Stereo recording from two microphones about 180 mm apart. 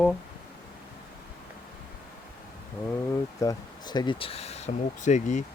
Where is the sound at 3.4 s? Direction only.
20° left (ahead or behind); by 5.4 s 40° left (ahead or behind).